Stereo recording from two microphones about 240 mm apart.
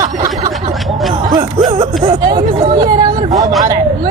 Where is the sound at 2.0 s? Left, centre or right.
Centre.